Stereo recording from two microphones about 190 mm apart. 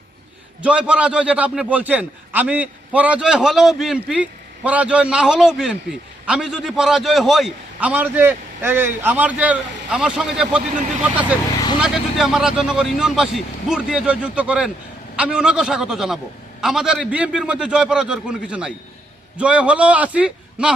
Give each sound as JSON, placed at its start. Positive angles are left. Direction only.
{"t": 0.6, "sound": "a man's voice", "side_deg": -5}